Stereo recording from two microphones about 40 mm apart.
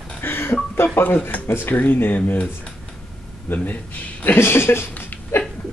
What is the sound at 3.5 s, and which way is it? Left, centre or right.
Speech, left.